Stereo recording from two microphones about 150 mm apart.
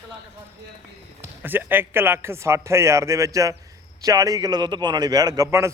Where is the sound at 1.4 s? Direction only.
15° right (ahead or behind).